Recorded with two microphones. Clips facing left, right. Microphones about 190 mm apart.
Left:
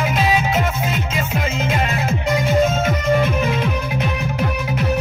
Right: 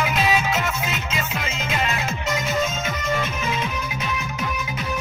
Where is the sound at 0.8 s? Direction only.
55° left (ahead or behind).